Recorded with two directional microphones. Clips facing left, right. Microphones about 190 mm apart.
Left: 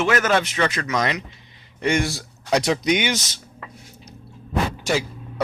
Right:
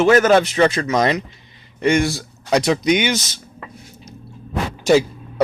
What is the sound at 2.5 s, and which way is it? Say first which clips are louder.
Speech: right 3 dB; 50° right (ahead or behind).